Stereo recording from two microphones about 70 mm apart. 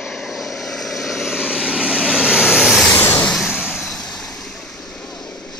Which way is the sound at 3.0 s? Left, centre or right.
Left.